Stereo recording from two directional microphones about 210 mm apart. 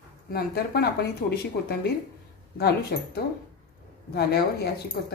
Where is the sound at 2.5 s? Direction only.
50° left (ahead or behind).